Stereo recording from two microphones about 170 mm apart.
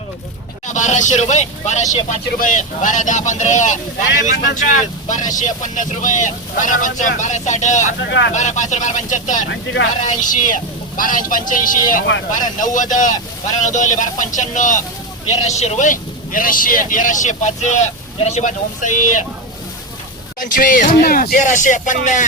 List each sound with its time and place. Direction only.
0.7 s speech: 45° left (ahead or behind)
20.4 s speech: 55° left (ahead or behind)